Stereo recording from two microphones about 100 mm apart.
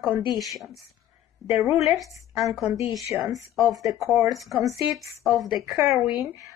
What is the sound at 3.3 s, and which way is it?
Speech, 35° right (ahead or behind).